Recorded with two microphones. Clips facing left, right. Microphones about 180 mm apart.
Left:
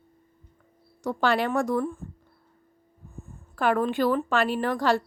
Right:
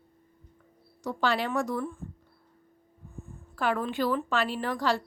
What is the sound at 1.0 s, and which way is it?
Speech, 55° left (ahead or behind).